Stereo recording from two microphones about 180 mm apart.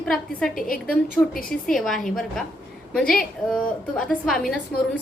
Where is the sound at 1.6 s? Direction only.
Centre (ahead or behind).